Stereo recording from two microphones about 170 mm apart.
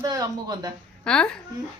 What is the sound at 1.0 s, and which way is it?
Speech, 5° left (ahead or behind).